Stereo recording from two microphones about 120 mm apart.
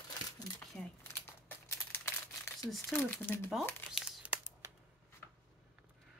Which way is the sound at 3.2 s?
20° left (ahead or behind).